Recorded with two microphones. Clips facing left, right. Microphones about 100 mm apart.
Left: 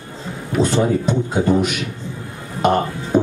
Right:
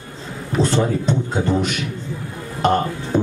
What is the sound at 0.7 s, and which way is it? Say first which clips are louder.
Speech: left 2 dB; 15° left (ahead or behind).